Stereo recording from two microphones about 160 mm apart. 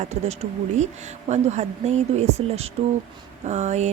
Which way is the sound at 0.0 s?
45° right (ahead or behind).